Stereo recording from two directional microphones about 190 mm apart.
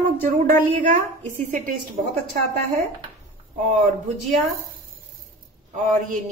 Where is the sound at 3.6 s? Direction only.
40° right (ahead or behind).